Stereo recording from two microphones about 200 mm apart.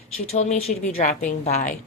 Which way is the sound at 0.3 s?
30° left (ahead or behind).